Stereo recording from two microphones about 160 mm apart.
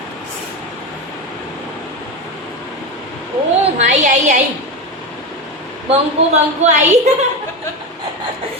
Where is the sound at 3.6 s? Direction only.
45° right (ahead or behind).